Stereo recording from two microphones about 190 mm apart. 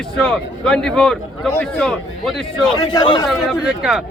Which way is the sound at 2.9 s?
25° left (ahead or behind).